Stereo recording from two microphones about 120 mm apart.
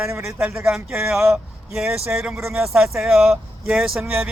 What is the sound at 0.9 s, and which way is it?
Speech, 5° right (ahead or behind).